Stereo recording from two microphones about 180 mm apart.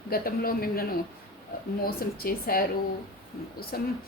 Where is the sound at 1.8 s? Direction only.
55° left (ahead or behind).